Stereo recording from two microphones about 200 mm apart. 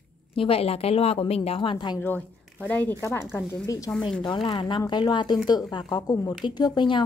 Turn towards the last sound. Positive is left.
turn(degrees=25)  # may be behind; listen again after turning